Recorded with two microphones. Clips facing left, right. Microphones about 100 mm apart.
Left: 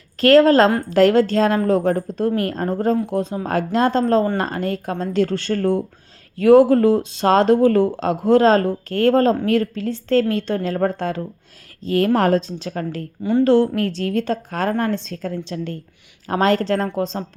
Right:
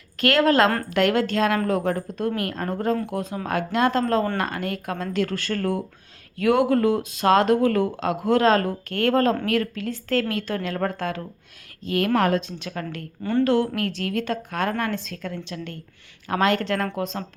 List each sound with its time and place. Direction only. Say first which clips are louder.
0.2 s speech: left 6 dB; 35° left (ahead or behind)